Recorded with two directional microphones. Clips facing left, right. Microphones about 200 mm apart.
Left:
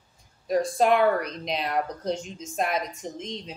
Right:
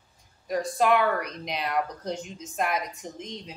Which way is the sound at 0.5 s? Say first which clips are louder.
Left 2 dB; 30° left (ahead or behind).